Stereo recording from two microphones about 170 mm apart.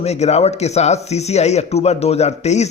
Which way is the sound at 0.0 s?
40° left (ahead or behind).